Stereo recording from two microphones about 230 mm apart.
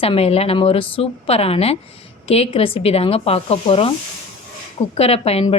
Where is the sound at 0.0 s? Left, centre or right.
Left.